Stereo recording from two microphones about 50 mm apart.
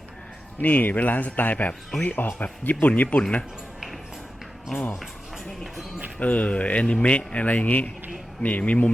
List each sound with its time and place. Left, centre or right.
0.6 s speech: left
6.1 s speech: left